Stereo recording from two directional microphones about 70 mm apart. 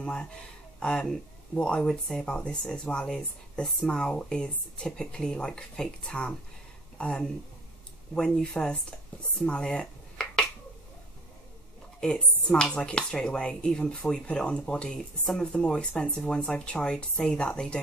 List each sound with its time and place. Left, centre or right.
0.0 s speech: centre
9.5 s a sound: centre
12.2 s speech: centre